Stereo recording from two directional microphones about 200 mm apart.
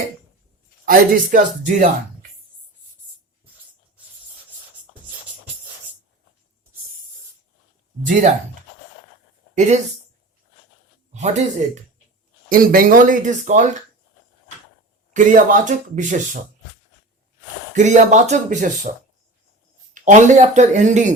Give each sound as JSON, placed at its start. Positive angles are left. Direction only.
{"t": 0.9, "sound": "speech", "side_deg": -40}
{"t": 8.0, "sound": "speech", "side_deg": -40}
{"t": 9.6, "sound": "speech", "side_deg": -35}
{"t": 11.1, "sound": "speech", "side_deg": -35}
{"t": 12.5, "sound": "speech", "side_deg": -45}
{"t": 15.1, "sound": "speech", "side_deg": -40}
{"t": 17.7, "sound": "speech", "side_deg": -35}